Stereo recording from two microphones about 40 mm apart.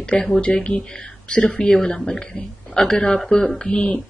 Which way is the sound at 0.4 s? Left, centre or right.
Left.